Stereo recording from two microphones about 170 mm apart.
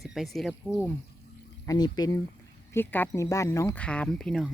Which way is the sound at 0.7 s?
10° left (ahead or behind).